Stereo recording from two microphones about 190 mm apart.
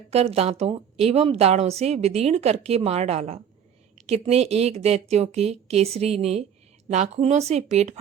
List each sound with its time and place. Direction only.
0.1 s speech: 35° right (ahead or behind)